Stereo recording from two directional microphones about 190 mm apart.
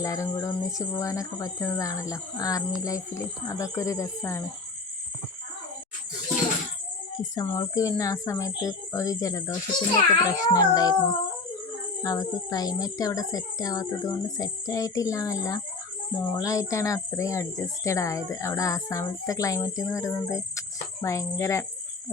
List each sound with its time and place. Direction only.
0.0 s speech: 15° left (ahead or behind)
7.2 s speech: 15° left (ahead or behind)